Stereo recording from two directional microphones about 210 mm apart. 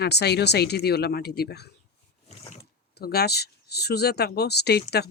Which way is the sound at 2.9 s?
50° left (ahead or behind).